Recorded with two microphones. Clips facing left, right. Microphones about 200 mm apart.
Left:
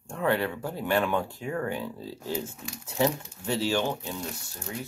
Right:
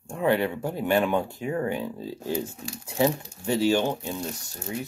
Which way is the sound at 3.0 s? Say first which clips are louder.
Right 2 dB; 15° right (ahead or behind).